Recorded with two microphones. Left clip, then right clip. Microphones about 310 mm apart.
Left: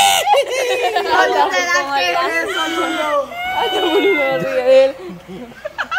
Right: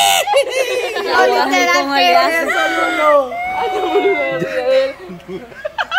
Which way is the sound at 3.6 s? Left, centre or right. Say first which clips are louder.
Left 1 dB; left.